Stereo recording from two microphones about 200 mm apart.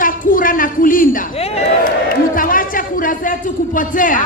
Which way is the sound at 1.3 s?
30° left (ahead or behind).